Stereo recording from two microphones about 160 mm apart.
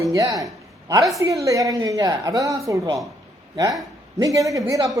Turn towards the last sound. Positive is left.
turn(degrees=-20)  # may be behind; listen again after turning